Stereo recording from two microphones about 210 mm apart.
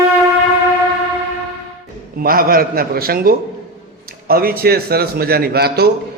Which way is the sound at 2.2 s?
45° right (ahead or behind).